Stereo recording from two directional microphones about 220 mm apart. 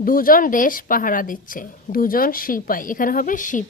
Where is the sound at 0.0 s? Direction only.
40° left (ahead or behind).